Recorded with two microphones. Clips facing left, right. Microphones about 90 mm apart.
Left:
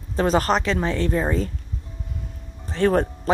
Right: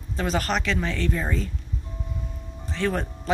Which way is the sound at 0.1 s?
35° left (ahead or behind).